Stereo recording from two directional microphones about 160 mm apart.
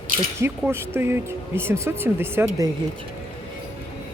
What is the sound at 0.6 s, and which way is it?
Speech, 15° right (ahead or behind).